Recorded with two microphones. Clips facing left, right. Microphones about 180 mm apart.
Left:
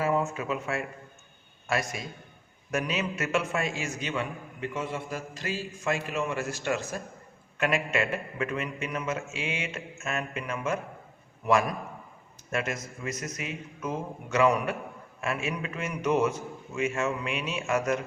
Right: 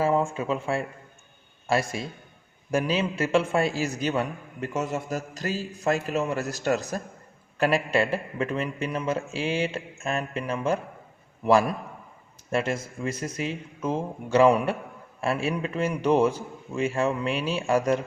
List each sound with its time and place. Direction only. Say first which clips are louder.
0.0 s a man's voice: right 4 dB; 30° right (ahead or behind)
12.5 s a man's voice: right 5 dB; 30° right (ahead or behind)